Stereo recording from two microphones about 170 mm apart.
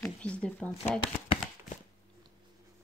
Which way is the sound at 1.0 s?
35° left (ahead or behind).